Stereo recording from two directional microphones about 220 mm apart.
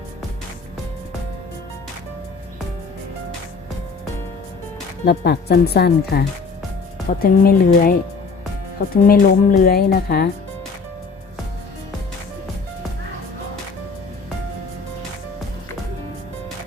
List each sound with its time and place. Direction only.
5.0 s speech: 45° left (ahead or behind)
9.0 s speech: 40° left (ahead or behind)